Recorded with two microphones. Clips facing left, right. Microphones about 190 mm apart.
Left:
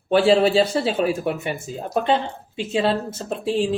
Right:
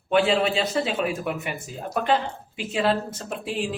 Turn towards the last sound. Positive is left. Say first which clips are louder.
# left 7 dB
turn(degrees=30)  # may be behind; listen again after turning